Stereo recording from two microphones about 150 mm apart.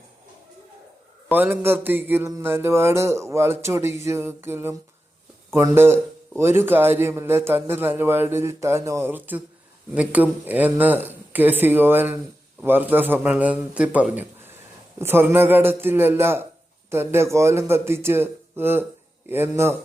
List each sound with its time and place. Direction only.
1.3 s a man's voice: 15° right (ahead or behind)